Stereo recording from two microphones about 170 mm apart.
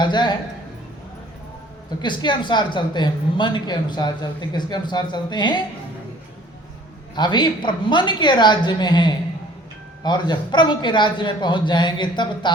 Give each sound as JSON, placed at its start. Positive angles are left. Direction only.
{"t": 0.0, "sound": "speech", "side_deg": 25}
{"t": 2.0, "sound": "speech", "side_deg": 25}
{"t": 7.2, "sound": "speech", "side_deg": 25}